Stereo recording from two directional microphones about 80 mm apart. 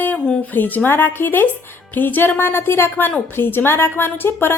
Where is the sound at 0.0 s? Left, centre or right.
Centre.